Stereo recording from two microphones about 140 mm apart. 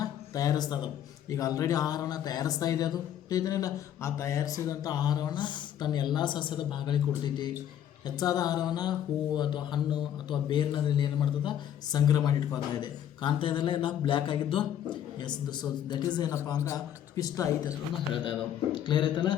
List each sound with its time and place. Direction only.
0.0 s a sound: 25° left (ahead or behind)
1.3 s a man's voice: 25° left (ahead or behind)
17.9 s a man's voice: 35° left (ahead or behind)